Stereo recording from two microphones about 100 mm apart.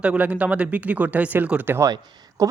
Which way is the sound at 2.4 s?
35° right (ahead or behind).